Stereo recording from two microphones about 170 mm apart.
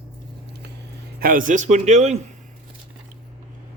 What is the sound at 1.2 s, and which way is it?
Speech, 55° right (ahead or behind).